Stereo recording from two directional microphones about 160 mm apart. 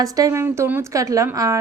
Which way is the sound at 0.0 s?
20° right (ahead or behind).